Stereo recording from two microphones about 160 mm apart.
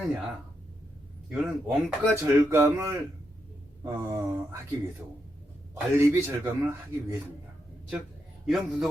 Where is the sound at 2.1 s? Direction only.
15° right (ahead or behind).